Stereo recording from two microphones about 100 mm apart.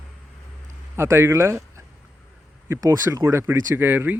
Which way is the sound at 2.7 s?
30° right (ahead or behind).